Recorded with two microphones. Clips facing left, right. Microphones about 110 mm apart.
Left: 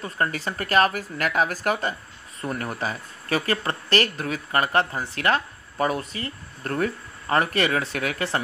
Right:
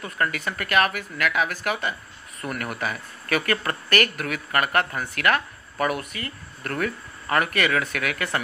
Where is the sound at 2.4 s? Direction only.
30° left (ahead or behind).